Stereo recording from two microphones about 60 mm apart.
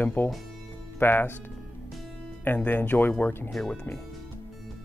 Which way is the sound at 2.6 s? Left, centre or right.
Left.